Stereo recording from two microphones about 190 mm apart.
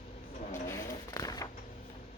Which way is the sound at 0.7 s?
15° left (ahead or behind).